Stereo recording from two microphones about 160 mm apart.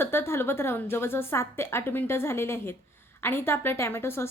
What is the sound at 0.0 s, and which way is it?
A woman's voice, 15° left (ahead or behind).